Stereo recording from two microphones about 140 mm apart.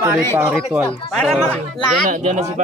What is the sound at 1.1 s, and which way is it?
Speech, 5° left (ahead or behind).